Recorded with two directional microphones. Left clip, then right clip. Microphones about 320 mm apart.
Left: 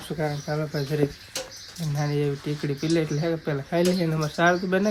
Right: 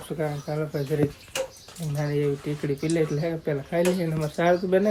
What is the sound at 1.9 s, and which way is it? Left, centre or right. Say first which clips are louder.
Speech: right 1 dB; centre.